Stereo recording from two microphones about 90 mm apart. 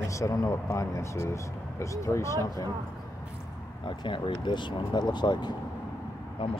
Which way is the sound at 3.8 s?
65° left (ahead or behind).